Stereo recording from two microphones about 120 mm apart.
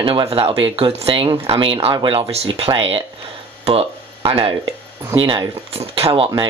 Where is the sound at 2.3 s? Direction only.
55° right (ahead or behind).